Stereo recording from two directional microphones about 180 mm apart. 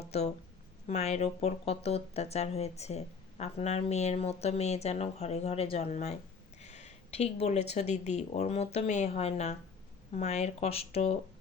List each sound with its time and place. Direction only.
0.0 s speech: 35° left (ahead or behind)